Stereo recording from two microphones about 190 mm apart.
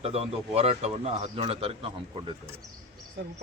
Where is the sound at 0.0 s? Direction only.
30° right (ahead or behind).